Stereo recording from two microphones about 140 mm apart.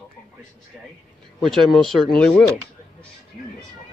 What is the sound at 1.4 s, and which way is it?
Speech, centre (ahead or behind).